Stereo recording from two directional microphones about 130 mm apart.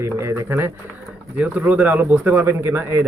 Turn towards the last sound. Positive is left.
turn(degrees=-20)  # may be behind; listen again after turning